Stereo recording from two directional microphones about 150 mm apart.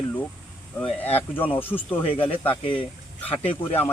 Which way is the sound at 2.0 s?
35° left (ahead or behind).